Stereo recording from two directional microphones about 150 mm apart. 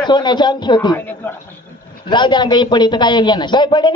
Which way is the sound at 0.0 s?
30° left (ahead or behind).